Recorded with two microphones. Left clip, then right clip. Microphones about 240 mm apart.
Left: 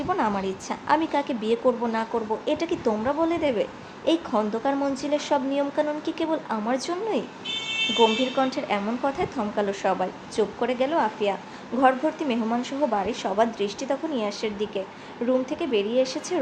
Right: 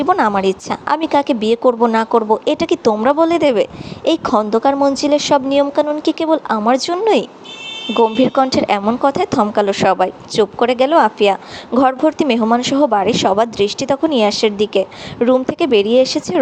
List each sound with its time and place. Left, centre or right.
0.0 s a woman's voice: right